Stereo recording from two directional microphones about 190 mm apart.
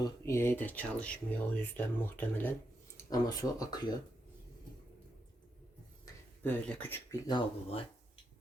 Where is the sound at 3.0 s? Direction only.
20° left (ahead or behind).